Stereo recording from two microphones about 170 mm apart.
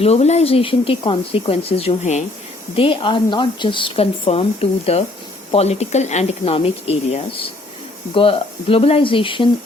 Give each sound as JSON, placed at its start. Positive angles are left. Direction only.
{"t": 0.0, "sound": "a woman's voice", "side_deg": 40}